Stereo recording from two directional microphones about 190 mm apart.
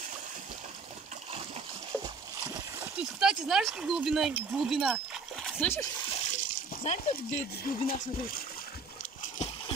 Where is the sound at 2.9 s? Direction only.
5° right (ahead or behind).